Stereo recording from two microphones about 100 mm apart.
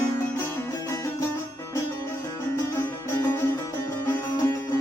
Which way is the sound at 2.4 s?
25° left (ahead or behind).